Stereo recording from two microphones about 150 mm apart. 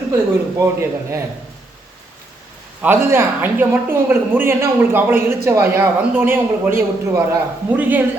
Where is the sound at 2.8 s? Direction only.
15° right (ahead or behind).